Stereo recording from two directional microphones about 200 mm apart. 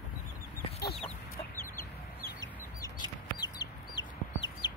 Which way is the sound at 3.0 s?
20° left (ahead or behind).